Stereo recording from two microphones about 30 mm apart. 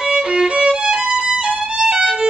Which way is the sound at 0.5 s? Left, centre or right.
Right.